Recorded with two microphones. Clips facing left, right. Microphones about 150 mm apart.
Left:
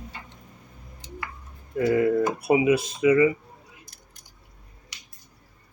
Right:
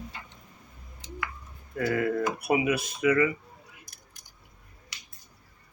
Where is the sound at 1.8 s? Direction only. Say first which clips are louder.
Left 6 dB; 25° left (ahead or behind).